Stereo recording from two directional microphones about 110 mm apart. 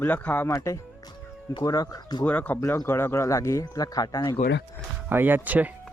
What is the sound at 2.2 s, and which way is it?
Speech, 15° left (ahead or behind).